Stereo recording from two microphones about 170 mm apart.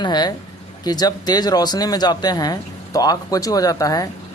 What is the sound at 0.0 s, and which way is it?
Speech, 25° left (ahead or behind).